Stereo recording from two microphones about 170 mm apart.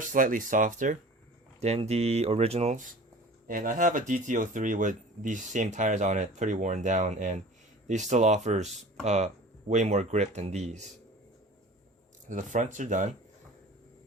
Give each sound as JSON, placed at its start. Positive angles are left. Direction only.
{"t": 0.0, "sound": "speech", "side_deg": -50}
{"t": 12.3, "sound": "speech", "side_deg": -45}